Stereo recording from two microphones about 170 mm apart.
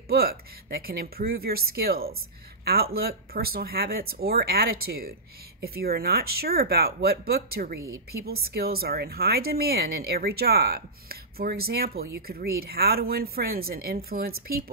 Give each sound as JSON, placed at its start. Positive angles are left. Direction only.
{"t": 0.1, "sound": "speech", "side_deg": -65}